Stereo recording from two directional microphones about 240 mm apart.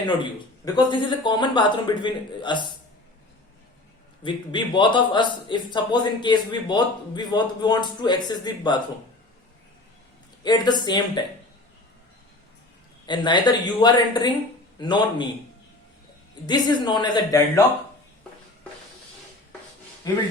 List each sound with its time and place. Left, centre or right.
0.2 s speech: centre
4.2 s a woman's voice: centre
10.4 s a woman's voice: centre
13.1 s speech: centre
16.5 s a woman's voice: centre